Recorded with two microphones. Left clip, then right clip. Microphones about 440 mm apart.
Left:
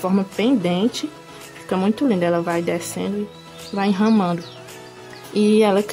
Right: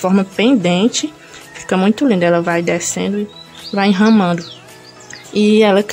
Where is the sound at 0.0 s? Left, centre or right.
Left.